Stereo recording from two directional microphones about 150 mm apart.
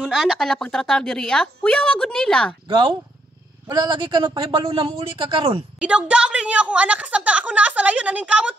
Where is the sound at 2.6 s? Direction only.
35° right (ahead or behind).